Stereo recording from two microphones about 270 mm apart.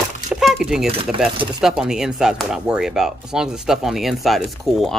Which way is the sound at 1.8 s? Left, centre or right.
Centre.